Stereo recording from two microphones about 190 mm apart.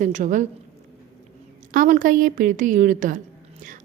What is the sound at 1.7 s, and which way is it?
A woman's voice, 45° right (ahead or behind).